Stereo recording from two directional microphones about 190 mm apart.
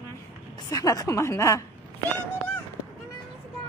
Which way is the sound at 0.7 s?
20° left (ahead or behind).